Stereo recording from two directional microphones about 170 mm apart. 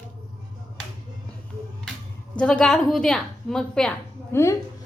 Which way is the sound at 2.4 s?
5° left (ahead or behind).